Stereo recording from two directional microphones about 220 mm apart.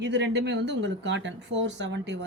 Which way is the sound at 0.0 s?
55° right (ahead or behind).